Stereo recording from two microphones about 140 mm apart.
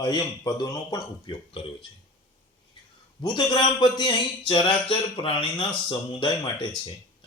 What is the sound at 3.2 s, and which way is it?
Speech, 30° left (ahead or behind).